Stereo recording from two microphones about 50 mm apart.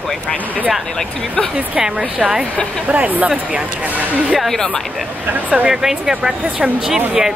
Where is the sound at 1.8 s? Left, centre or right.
Centre.